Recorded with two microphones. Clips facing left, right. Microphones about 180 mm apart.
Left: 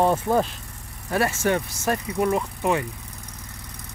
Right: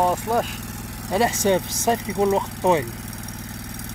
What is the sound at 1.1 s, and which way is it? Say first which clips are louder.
Speech: right 3 dB; 20° right (ahead or behind).